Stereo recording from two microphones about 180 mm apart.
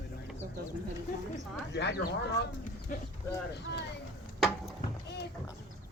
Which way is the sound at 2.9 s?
50° left (ahead or behind).